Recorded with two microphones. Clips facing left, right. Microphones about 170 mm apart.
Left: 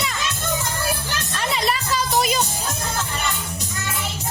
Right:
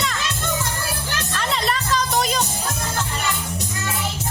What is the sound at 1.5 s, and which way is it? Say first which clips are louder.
Music: even; 10° left (ahead or behind).